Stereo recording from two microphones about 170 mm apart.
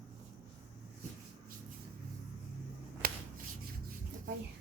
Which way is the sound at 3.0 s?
60° right (ahead or behind).